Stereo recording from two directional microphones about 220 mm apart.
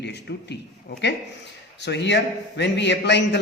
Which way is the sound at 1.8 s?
50° left (ahead or behind).